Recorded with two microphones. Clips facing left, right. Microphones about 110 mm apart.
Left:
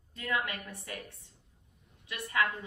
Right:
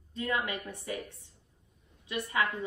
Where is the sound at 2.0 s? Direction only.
25° right (ahead or behind).